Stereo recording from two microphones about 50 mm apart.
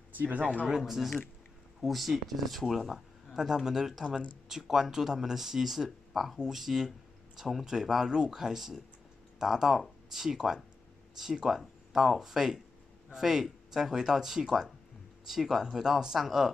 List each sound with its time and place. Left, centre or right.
0.2 s speech: right
0.7 s speech: centre